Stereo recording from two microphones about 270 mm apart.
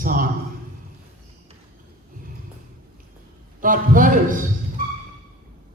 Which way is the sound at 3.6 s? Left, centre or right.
Right.